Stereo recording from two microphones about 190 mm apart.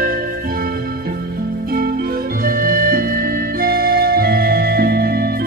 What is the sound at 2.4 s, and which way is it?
Music, 50° right (ahead or behind).